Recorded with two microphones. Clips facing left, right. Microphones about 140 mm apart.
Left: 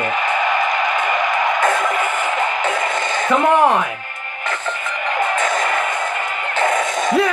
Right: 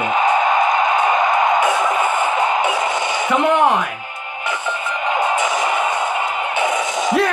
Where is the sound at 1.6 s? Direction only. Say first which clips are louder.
Right 1 dB; 60° left (ahead or behind).